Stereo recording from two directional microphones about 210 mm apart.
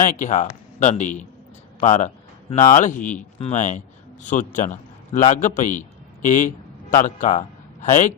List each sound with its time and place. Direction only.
0.0 s a man's voice: 40° left (ahead or behind)